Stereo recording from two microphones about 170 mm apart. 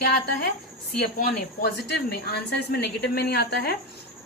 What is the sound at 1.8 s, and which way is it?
Speech, 75° left (ahead or behind).